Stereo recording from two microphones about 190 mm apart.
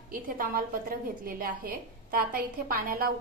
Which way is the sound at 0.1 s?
50° right (ahead or behind).